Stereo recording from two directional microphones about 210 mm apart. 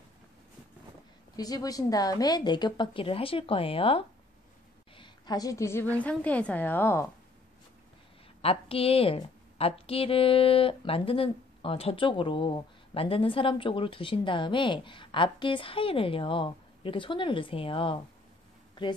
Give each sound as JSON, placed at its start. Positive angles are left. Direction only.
{"t": 1.3, "sound": "a woman's voice", "side_deg": 20}
{"t": 4.9, "sound": "a sound", "side_deg": 20}
{"t": 5.9, "sound": "a woman's voice", "side_deg": 5}
{"t": 8.4, "sound": "a woman's voice", "side_deg": 25}